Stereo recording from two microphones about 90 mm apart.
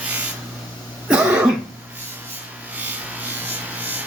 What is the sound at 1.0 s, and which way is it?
Cough, 15° right (ahead or behind).